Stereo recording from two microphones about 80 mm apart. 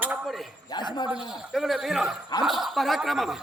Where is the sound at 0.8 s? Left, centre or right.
Left.